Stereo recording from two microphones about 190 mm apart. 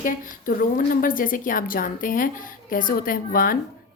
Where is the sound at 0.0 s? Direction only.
45° left (ahead or behind).